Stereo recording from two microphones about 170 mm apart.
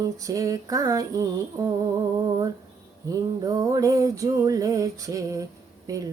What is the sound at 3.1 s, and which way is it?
Music, 20° right (ahead or behind).